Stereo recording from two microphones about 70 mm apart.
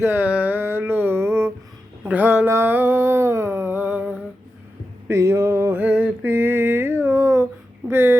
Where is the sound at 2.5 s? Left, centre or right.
Right.